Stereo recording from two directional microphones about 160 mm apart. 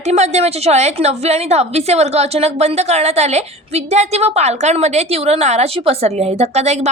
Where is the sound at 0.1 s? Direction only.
45° right (ahead or behind).